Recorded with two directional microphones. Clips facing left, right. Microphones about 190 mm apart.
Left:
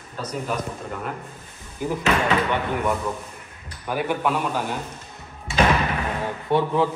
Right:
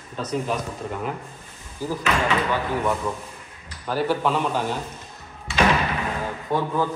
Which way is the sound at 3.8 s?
15° left (ahead or behind).